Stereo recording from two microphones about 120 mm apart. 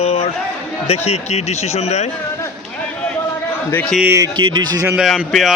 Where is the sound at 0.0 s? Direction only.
60° left (ahead or behind).